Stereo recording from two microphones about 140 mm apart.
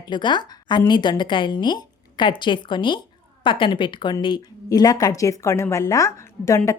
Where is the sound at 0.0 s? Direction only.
35° left (ahead or behind).